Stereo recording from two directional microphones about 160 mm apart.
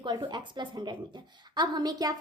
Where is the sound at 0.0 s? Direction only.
30° right (ahead or behind).